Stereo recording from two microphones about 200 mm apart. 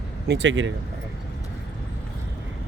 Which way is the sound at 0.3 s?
65° right (ahead or behind).